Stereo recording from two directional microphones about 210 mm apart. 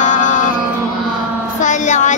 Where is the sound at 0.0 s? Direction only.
35° left (ahead or behind).